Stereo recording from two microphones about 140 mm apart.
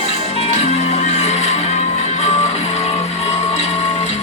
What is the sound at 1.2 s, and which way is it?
Music, 50° left (ahead or behind).